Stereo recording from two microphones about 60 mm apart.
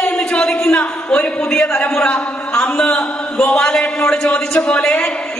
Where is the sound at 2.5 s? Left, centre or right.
Centre.